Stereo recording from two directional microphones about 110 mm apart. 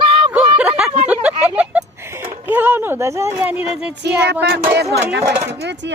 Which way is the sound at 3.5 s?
10° right (ahead or behind).